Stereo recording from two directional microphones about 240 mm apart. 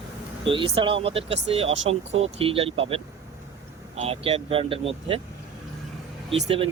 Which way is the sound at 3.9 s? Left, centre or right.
Right.